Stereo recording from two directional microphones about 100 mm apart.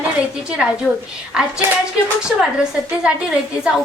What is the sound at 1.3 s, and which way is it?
A woman's voice, 5° right (ahead or behind).